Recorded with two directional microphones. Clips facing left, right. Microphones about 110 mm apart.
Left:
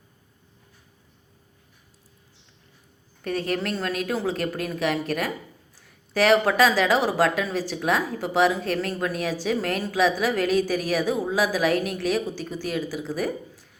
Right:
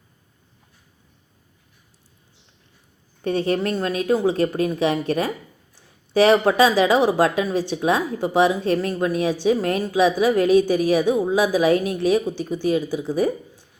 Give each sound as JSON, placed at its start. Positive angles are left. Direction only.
{"t": 3.2, "sound": "speech", "side_deg": -25}